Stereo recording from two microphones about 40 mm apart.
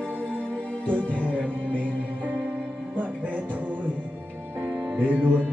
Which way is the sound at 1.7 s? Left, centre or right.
Left.